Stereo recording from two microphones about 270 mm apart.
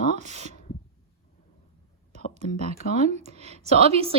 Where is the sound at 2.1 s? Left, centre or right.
Right.